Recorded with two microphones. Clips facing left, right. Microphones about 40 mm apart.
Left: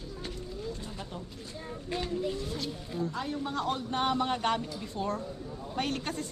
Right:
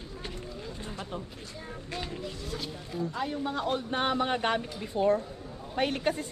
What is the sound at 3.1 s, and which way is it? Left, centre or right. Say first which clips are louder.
Speech: right 2 dB; centre.